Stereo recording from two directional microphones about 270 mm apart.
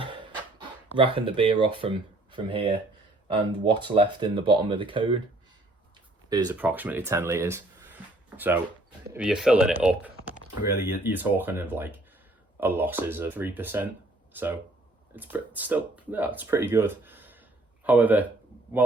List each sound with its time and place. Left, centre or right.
0.9 s speech: centre
6.3 s speech: centre